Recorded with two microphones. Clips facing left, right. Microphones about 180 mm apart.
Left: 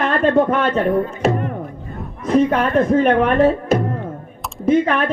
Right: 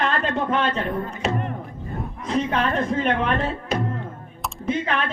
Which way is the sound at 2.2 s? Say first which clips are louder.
Left 8 dB; 50° left (ahead or behind).